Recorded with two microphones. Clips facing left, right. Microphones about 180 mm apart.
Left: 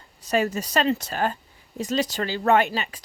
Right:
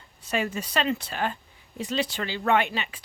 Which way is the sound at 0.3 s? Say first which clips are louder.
Left 5 dB; 40° left (ahead or behind).